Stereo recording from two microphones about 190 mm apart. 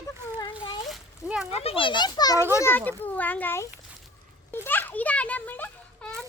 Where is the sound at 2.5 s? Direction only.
10° left (ahead or behind).